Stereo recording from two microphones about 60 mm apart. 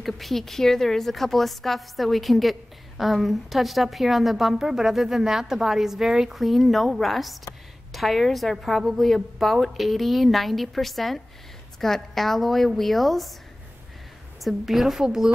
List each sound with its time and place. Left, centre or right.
0.0 s a woman's voice: centre
14.4 s a woman's voice: centre